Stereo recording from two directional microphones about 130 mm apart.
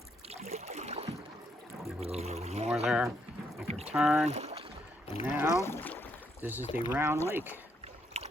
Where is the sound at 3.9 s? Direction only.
Centre (ahead or behind).